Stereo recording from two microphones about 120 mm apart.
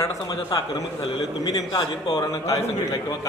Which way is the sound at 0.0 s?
30° left (ahead or behind).